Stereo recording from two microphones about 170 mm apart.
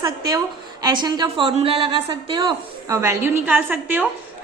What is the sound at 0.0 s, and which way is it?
A woman's voice, 20° right (ahead or behind).